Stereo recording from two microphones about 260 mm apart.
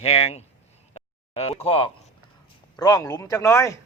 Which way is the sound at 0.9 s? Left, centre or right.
Left.